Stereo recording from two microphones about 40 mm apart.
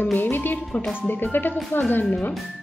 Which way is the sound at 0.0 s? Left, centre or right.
Left.